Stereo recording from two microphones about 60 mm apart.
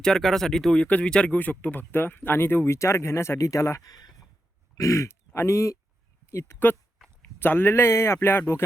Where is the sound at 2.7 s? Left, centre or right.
Left.